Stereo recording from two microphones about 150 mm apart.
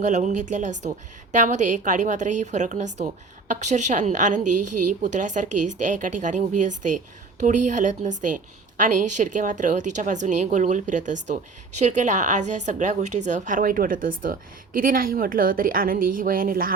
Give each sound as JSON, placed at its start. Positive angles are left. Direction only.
{"t": 0.0, "sound": "a woman's voice", "side_deg": -55}